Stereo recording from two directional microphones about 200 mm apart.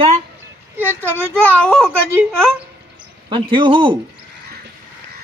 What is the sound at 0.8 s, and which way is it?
A child's voice, 10° left (ahead or behind).